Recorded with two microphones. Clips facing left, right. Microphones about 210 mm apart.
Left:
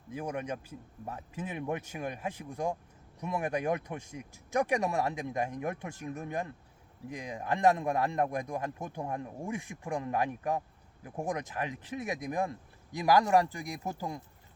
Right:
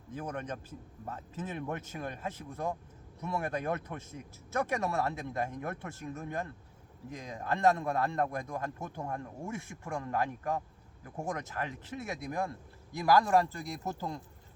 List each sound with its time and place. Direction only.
0.1 s a man's voice: 10° left (ahead or behind)